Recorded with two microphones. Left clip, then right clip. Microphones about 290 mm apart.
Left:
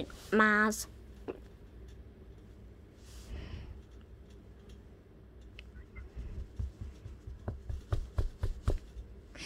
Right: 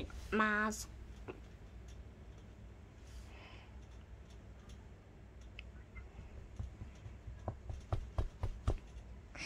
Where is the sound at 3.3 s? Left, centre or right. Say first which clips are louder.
Left 5 dB; centre.